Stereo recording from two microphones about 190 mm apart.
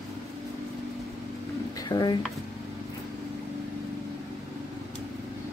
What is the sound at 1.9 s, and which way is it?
Speech, 20° left (ahead or behind).